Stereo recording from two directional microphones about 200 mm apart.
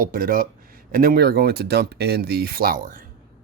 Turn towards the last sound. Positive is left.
turn(degrees=-45)  # may be behind; listen again after turning